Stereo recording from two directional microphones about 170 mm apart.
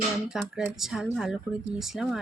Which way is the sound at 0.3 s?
5° right (ahead or behind).